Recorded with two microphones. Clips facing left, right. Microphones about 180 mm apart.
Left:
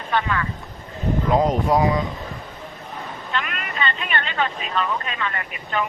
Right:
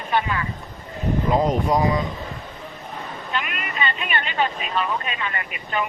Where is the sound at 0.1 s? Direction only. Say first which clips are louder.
Even; 15° right (ahead or behind).